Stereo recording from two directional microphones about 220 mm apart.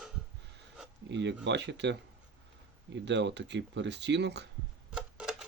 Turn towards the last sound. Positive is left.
turn(degrees=-5)  # may be behind; listen again after turning